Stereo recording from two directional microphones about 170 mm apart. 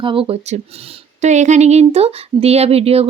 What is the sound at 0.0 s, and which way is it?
Speech, 30° right (ahead or behind).